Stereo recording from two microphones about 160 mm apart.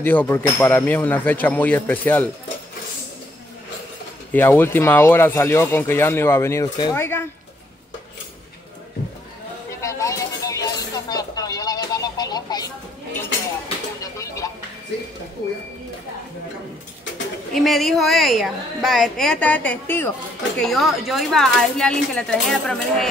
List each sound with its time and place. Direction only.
0.0 s speech: 10° left (ahead or behind)
4.3 s speech: 15° left (ahead or behind)
9.7 s a sound: 20° left (ahead or behind)
14.1 s music: 20° left (ahead or behind)
17.6 s a woman's voice: centre (ahead or behind)